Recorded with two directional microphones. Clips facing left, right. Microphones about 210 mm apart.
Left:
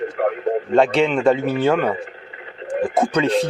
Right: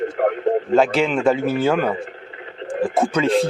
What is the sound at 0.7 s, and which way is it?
Speech, centre (ahead or behind).